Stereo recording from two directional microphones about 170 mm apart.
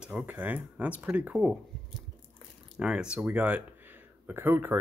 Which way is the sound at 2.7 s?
5° right (ahead or behind).